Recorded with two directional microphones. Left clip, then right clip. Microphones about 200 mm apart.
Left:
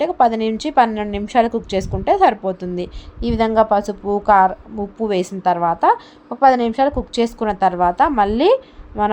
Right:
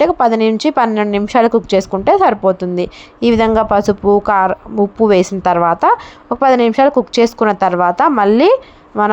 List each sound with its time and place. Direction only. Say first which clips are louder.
0.0 s a woman's voice: right 5 dB; 20° right (ahead or behind)